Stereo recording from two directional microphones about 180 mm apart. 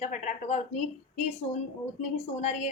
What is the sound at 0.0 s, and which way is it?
A woman's voice, 40° left (ahead or behind).